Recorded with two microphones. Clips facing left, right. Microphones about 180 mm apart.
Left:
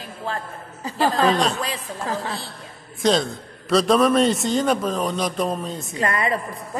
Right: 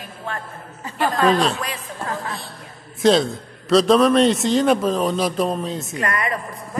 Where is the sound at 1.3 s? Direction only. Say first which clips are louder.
Right 2 dB; centre (ahead or behind).